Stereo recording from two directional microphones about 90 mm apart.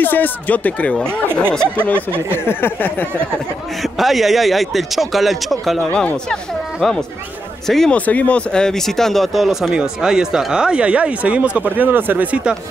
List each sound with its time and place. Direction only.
0.0 s speech: 20° left (ahead or behind)
2.0 s speech: 25° right (ahead or behind)
2.3 s speech: 25° left (ahead or behind)
3.8 s speech: centre (ahead or behind)
5.9 s speech: 20° left (ahead or behind)
6.8 s speech: 5° left (ahead or behind)
8.0 s speech: 15° left (ahead or behind); by 12.5 s 20° right (ahead or behind)